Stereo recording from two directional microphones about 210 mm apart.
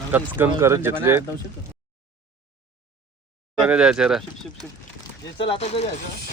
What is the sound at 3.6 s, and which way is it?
Speech, 5° right (ahead or behind).